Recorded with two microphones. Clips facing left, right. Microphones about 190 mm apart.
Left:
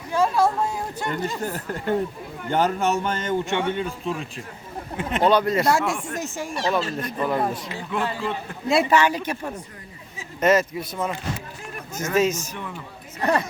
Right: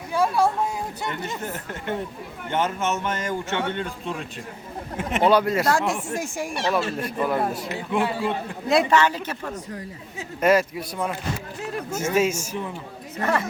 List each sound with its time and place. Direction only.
0.1 s a sound: 10° right (ahead or behind)
1.4 s speech: 35° left (ahead or behind)
3.5 s speech: 10° left (ahead or behind)
6.1 s a man's voice: 10° right (ahead or behind)
8.7 s speech: 5° left (ahead or behind)
10.4 s a man's voice: centre (ahead or behind)
13.2 s a woman's voice: 20° left (ahead or behind)